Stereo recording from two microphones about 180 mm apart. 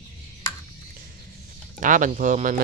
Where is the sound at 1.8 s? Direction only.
45° right (ahead or behind).